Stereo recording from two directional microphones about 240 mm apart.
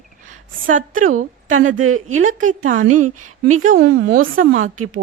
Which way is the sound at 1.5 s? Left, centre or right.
Right.